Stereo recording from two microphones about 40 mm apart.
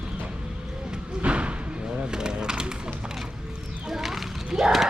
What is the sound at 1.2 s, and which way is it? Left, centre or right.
Thump, right.